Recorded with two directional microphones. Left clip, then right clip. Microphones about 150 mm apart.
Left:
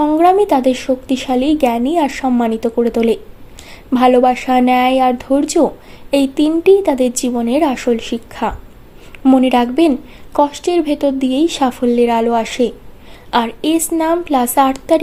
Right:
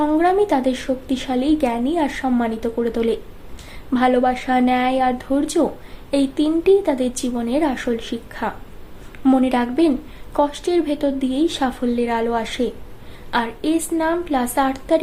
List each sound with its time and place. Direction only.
0.0 s a woman's voice: 45° left (ahead or behind)